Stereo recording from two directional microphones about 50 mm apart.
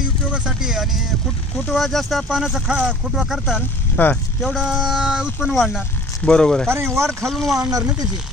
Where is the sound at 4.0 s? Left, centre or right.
Left.